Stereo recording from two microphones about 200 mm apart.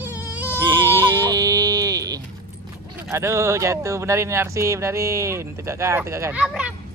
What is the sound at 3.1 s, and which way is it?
Speech, 15° right (ahead or behind).